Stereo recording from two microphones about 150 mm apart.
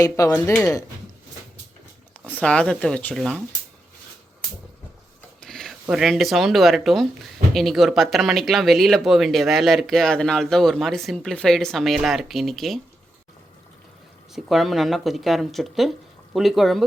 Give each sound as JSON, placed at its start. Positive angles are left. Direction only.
{"t": 0.0, "sound": "speech", "side_deg": 25}
{"t": 2.2, "sound": "speech", "side_deg": 10}
{"t": 5.4, "sound": "a sound", "side_deg": 5}
{"t": 5.9, "sound": "speech", "side_deg": 0}
{"t": 14.3, "sound": "speech", "side_deg": 0}